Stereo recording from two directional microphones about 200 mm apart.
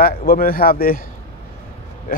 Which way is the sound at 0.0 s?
45° left (ahead or behind).